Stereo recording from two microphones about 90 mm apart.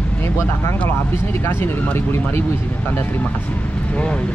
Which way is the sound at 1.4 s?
25° left (ahead or behind).